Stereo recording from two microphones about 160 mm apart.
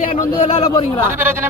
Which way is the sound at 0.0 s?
60° left (ahead or behind).